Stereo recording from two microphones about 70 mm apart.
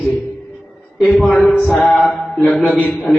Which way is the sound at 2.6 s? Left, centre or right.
Centre.